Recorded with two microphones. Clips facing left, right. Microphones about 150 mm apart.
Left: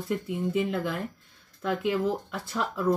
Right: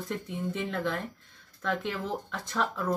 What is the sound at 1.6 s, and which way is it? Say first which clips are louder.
Speech: left 5 dB; 15° left (ahead or behind).